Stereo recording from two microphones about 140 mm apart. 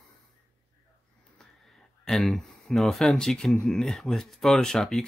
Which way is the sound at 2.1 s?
Centre (ahead or behind).